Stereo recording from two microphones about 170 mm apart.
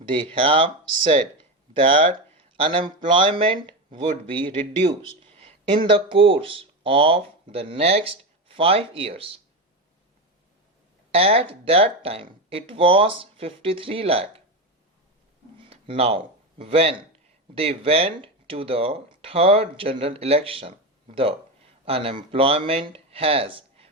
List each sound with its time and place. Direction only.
0.1 s speech: 30° right (ahead or behind)
11.1 s speech: 35° right (ahead or behind)
15.5 s speech: 30° right (ahead or behind)